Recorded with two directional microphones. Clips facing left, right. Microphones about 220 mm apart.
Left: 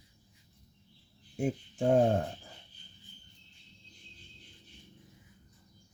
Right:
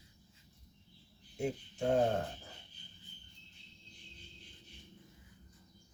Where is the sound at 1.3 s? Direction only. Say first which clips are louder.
Left 4 dB; 50° left (ahead or behind).